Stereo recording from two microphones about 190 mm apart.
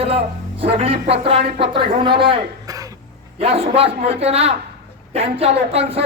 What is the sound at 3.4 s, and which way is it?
A man's voice, 30° right (ahead or behind).